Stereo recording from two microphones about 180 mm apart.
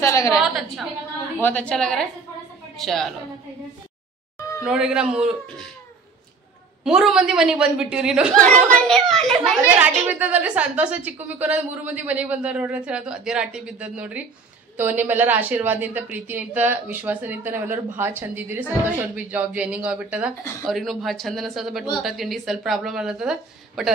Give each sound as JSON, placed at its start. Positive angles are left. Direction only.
{"t": 0.0, "sound": "a woman's voice", "side_deg": 15}
{"t": 0.3, "sound": "speech", "side_deg": 0}
{"t": 4.6, "sound": "speech", "side_deg": -5}
{"t": 6.8, "sound": "a child's voice", "side_deg": -5}